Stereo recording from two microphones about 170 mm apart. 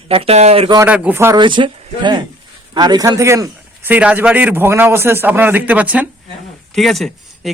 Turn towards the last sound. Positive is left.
turn(degrees=0)  # may be behind; listen again after turning